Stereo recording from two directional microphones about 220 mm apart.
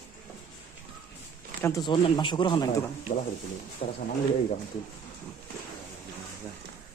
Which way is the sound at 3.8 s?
30° left (ahead or behind).